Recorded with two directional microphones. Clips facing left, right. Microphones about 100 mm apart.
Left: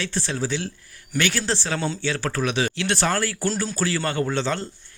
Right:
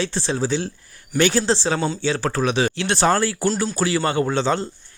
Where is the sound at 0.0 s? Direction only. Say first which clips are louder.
Right 4 dB; 25° right (ahead or behind).